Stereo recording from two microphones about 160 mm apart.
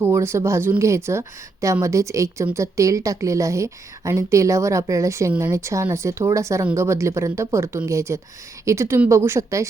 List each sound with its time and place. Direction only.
0.0 s a woman's voice: 15° right (ahead or behind)